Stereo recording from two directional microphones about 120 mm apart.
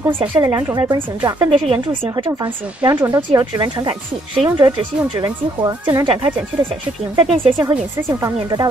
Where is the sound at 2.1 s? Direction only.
35° right (ahead or behind).